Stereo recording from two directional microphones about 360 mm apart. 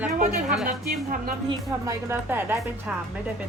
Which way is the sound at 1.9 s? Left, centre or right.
Centre.